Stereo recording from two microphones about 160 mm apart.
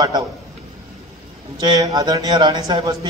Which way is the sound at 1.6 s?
25° right (ahead or behind).